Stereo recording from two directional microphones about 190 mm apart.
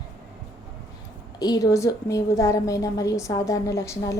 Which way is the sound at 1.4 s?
20° left (ahead or behind).